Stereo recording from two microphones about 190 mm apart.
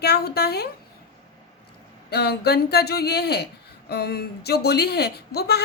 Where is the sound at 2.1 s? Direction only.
55° left (ahead or behind).